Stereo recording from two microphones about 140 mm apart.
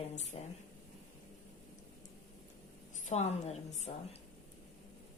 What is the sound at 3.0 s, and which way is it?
Speech, 55° left (ahead or behind).